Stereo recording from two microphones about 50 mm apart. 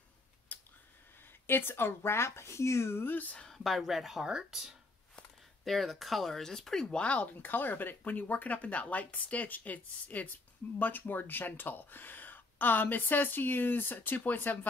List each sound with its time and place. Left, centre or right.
0.5 s a sound: left
1.5 s speech: left
3.1 s speech: left
3.5 s speech: centre; by 14.7 s left